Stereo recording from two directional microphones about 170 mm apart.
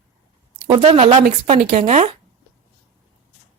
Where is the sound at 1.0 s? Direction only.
45° right (ahead or behind).